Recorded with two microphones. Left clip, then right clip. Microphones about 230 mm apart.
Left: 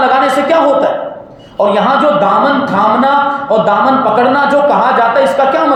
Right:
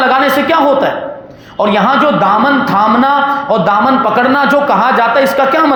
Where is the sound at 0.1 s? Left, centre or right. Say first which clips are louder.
Even; right.